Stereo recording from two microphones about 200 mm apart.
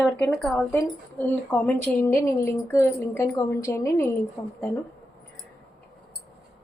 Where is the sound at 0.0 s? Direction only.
5° left (ahead or behind).